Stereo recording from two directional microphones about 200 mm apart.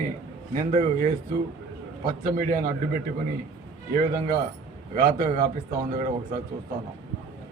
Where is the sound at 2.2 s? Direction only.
45° right (ahead or behind).